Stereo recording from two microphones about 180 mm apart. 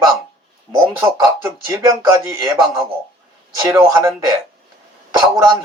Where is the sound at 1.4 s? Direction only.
15° right (ahead or behind).